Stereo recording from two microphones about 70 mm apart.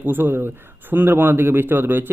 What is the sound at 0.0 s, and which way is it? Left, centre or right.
Speech, right.